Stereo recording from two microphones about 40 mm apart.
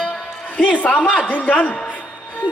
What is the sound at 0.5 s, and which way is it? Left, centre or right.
Speech, left.